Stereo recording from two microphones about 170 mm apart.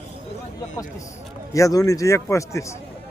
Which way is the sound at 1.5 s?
20° left (ahead or behind).